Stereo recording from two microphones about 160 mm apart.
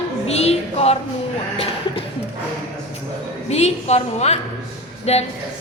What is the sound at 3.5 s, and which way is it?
A woman's voice, 45° left (ahead or behind).